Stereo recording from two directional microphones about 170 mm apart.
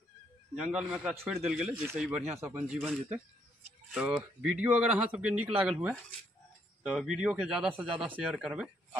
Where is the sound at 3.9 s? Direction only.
5° right (ahead or behind).